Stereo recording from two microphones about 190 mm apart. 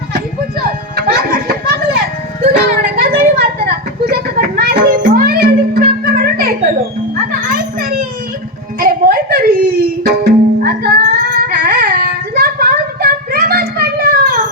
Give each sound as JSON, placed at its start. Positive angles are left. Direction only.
{"t": 0.9, "sound": "music", "side_deg": -55}
{"t": 3.0, "sound": "a sound", "side_deg": -50}
{"t": 4.0, "sound": "music", "side_deg": -55}
{"t": 7.3, "sound": "children playing", "side_deg": -50}
{"t": 8.8, "sound": "music", "side_deg": -50}